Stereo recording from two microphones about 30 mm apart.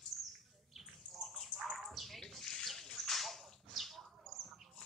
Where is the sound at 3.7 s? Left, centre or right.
Centre.